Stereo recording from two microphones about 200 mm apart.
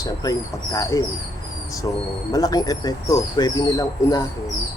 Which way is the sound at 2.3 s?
20° left (ahead or behind).